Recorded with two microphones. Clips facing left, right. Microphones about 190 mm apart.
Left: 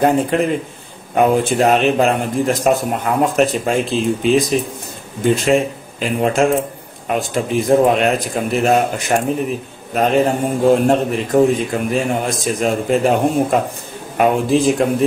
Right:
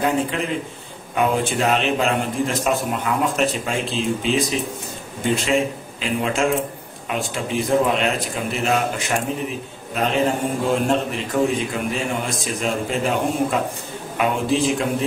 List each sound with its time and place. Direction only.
0.0 s a man's voice: 50° left (ahead or behind)